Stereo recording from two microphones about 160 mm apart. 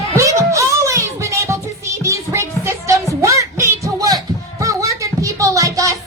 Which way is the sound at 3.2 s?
20° right (ahead or behind).